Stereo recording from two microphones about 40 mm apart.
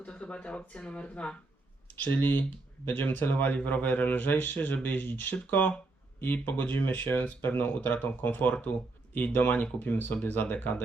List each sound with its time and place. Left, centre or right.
0.0 s speech: left
2.0 s a man's voice: left